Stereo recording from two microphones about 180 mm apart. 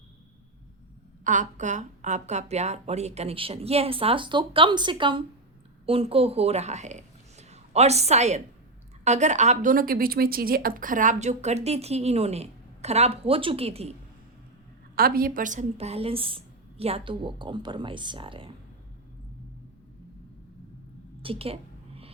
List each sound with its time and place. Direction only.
1.2 s a woman's voice: 45° right (ahead or behind)
14.9 s a woman's voice: 55° right (ahead or behind); by 18.5 s 30° right (ahead or behind)
21.2 s a sound: 30° right (ahead or behind)